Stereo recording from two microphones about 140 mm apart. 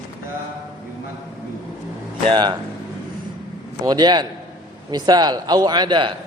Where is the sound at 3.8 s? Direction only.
30° right (ahead or behind).